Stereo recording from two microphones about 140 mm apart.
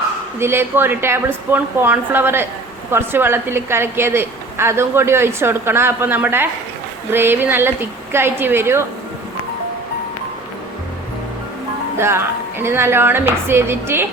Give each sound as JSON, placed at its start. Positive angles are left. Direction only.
{"t": 0.3, "sound": "a woman's voice", "side_deg": -15}
{"t": 11.9, "sound": "a woman's voice", "side_deg": -15}